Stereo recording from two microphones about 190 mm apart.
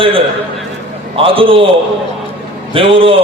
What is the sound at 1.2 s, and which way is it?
Speech, 30° right (ahead or behind).